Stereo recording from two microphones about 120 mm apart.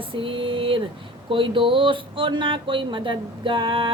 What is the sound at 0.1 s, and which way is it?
Speech, 45° right (ahead or behind).